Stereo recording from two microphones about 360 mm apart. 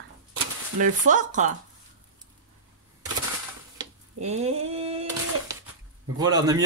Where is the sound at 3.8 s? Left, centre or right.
Centre.